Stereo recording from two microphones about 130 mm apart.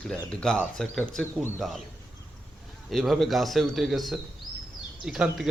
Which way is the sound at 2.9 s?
Centre (ahead or behind).